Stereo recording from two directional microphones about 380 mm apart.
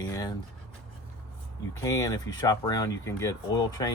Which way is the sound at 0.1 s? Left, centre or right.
Centre.